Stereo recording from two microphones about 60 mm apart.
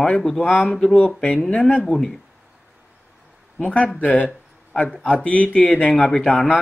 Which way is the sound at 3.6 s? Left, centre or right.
Left.